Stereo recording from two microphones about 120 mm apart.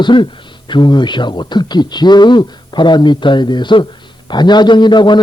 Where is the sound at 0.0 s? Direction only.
40° left (ahead or behind).